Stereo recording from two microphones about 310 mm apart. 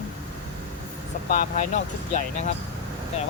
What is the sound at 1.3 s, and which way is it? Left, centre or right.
Speech, left.